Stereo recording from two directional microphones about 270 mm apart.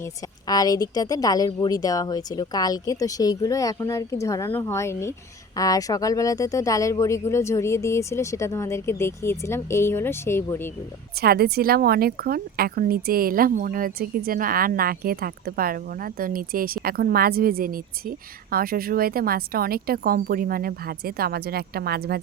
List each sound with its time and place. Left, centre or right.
0.0 s a woman's voice: centre
11.2 s speech: right